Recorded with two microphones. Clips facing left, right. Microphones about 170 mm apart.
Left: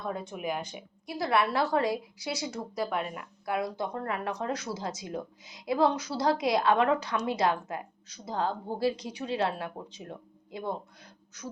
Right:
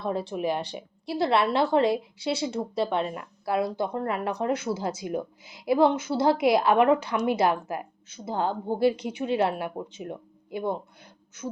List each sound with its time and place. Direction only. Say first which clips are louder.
0.0 s a woman's voice: right 6 dB; 30° right (ahead or behind)